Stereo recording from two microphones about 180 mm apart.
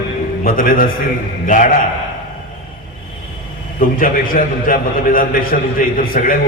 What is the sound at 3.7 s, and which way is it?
A man's voice, 50° left (ahead or behind).